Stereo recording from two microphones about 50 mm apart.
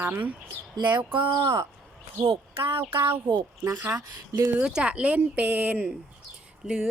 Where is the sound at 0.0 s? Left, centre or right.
Right.